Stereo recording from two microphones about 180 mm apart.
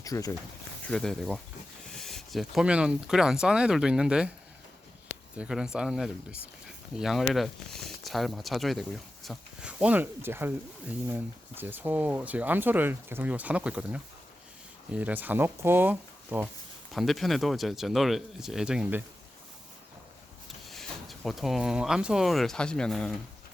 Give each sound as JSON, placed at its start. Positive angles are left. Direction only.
{"t": 0.0, "sound": "speech", "side_deg": 20}
{"t": 0.9, "sound": "speech", "side_deg": 5}
{"t": 5.4, "sound": "speech", "side_deg": -5}
{"t": 16.9, "sound": "speech", "side_deg": 0}
{"t": 20.7, "sound": "speech", "side_deg": 0}